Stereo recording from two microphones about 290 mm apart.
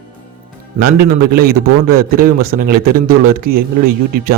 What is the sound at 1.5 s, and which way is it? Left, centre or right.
Speech, right.